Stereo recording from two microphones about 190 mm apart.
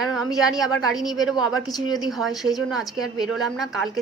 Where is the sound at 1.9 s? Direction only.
Centre (ahead or behind).